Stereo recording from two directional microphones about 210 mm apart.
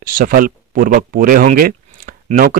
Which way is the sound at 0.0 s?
40° right (ahead or behind).